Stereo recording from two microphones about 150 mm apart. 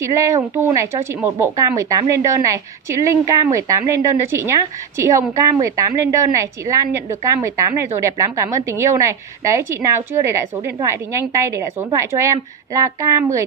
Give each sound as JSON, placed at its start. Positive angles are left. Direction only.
{"t": 0.1, "sound": "speech", "side_deg": -20}